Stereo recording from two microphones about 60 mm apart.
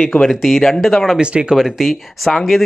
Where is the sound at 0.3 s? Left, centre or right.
Centre.